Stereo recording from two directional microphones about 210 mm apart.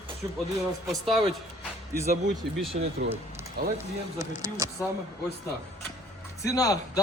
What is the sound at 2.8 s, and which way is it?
Speech, 45° right (ahead or behind).